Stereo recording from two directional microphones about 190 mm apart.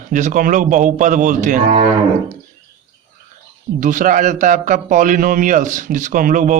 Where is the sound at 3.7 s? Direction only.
45° right (ahead or behind).